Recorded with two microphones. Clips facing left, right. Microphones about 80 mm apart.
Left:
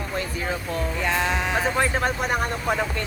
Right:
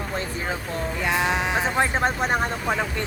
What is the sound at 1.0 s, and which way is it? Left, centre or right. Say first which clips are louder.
Speech: right 2 dB; centre.